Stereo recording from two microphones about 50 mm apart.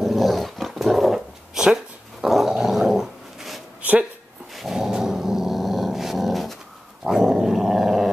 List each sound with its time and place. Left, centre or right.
0.0 s dog: centre